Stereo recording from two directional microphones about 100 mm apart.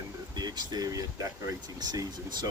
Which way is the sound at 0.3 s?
45° right (ahead or behind).